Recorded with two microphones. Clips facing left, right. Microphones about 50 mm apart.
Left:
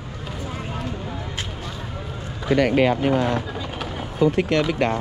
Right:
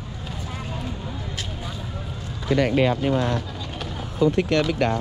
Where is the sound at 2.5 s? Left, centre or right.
Left.